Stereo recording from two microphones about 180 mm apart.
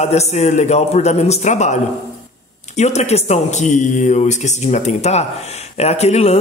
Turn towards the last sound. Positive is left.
turn(degrees=35)  # may be behind; listen again after turning